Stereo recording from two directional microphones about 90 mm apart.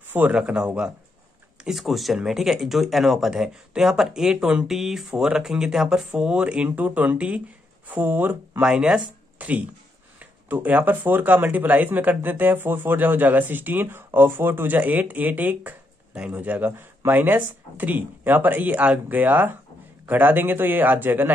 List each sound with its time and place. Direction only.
0.1 s speech: 15° right (ahead or behind)